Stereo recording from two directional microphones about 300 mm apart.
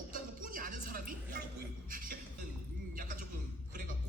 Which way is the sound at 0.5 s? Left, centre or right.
Right.